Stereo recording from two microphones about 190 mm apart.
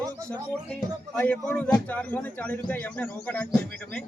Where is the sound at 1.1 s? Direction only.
5° left (ahead or behind).